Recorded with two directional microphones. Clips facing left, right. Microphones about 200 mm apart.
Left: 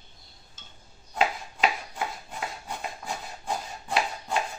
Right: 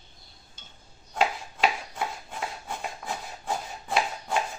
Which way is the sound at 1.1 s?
5° left (ahead or behind).